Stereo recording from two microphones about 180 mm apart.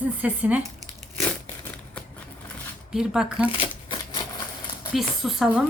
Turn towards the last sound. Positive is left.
turn(degrees=-5)  # may be behind; listen again after turning